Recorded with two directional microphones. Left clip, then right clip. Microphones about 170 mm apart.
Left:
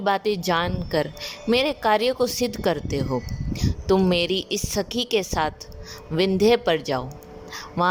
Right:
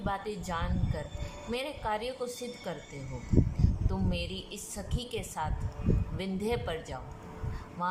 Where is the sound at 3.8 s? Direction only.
70° left (ahead or behind).